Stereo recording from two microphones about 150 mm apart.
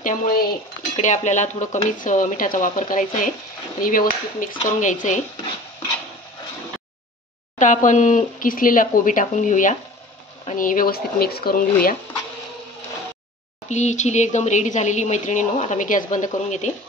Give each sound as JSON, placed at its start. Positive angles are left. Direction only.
{"t": 0.0, "sound": "cutlery", "side_deg": 75}
{"t": 0.9, "sound": "speech", "side_deg": 50}
{"t": 3.8, "sound": "speech", "side_deg": 65}
{"t": 7.5, "sound": "speech", "side_deg": 55}
{"t": 13.7, "sound": "a woman's voice", "side_deg": 50}